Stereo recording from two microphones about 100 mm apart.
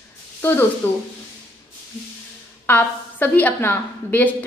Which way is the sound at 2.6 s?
20° left (ahead or behind).